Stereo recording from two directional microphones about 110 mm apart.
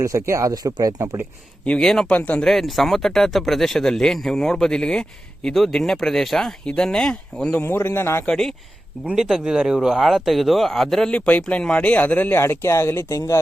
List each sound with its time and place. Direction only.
0.0 s speech: 25° right (ahead or behind)
1.6 s speech: 10° left (ahead or behind)
7.6 s a man's voice: 20° left (ahead or behind)
8.3 s speech: 5° left (ahead or behind); by 13.4 s 30° left (ahead or behind)